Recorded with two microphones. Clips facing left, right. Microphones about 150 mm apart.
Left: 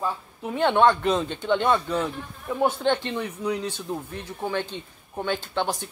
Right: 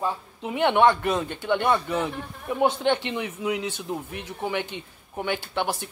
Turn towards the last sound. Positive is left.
turn(degrees=-15)  # may be behind; listen again after turning